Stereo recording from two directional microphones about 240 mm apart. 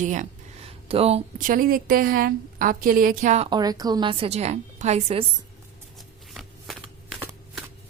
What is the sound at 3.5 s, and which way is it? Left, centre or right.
A woman's voice, centre.